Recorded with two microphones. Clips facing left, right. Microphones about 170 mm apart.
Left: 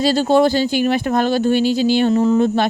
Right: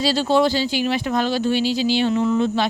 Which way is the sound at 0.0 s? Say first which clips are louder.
Left 4 dB; 50° left (ahead or behind).